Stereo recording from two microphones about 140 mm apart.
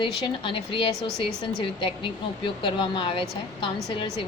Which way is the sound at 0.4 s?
40° left (ahead or behind).